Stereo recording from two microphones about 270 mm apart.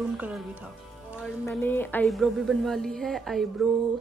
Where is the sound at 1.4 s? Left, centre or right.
Centre.